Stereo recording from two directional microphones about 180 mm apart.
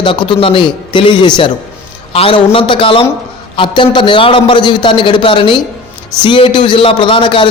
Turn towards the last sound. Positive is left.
turn(degrees=30)  # may be behind; listen again after turning